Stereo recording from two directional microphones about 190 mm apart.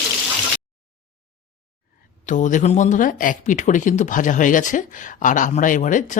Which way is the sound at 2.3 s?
40° left (ahead or behind).